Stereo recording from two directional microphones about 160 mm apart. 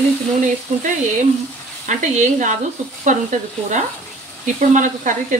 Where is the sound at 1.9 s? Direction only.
50° right (ahead or behind).